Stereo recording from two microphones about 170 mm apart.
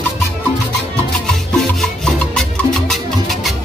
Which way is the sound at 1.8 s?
5° left (ahead or behind).